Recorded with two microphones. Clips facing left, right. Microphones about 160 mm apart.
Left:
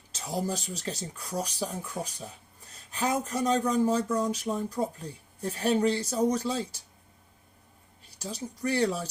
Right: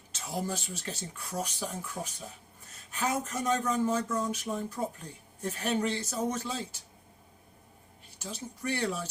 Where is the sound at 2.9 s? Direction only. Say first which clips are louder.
Left 3 dB; 35° left (ahead or behind).